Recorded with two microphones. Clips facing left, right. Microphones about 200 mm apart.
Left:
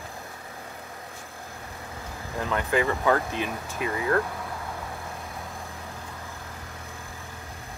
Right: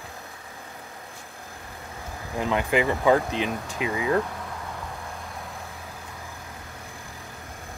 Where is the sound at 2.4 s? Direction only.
20° right (ahead or behind).